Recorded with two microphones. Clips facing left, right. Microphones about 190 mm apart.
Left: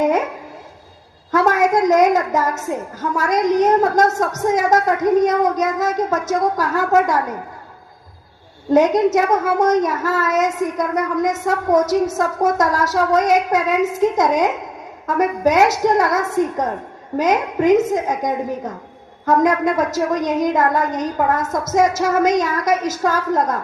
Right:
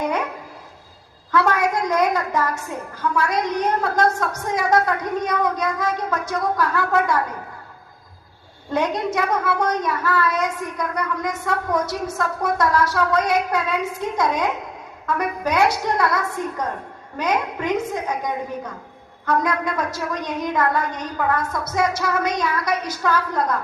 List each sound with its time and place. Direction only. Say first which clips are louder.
1.3 s a woman's voice: left 4 dB; 40° left (ahead or behind)
8.7 s a woman's voice: left 9 dB; 40° left (ahead or behind)